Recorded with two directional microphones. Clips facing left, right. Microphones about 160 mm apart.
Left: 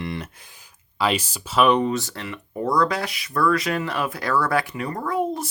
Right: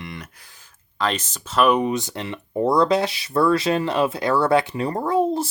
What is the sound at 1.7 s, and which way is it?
Speech, 15° right (ahead or behind).